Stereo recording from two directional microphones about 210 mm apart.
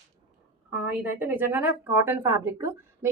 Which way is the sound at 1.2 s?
10° right (ahead or behind).